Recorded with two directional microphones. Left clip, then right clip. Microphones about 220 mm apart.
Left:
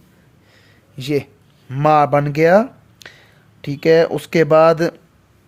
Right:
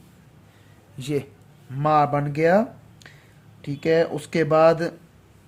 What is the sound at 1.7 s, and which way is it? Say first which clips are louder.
Speech: left 7 dB; 45° left (ahead or behind).